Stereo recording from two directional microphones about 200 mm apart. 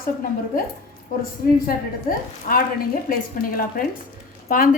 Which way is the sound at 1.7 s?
45° left (ahead or behind).